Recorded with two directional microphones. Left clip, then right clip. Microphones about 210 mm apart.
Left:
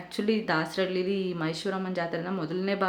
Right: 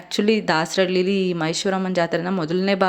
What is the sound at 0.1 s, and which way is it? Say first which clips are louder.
A woman's voice: right 8 dB; 40° right (ahead or behind).